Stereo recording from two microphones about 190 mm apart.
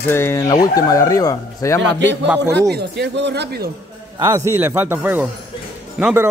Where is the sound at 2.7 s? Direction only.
60° right (ahead or behind).